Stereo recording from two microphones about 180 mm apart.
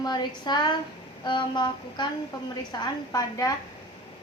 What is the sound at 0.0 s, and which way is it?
Child singing, 25° left (ahead or behind).